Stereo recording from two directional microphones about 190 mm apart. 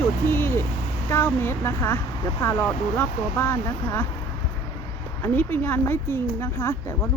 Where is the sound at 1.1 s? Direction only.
10° left (ahead or behind).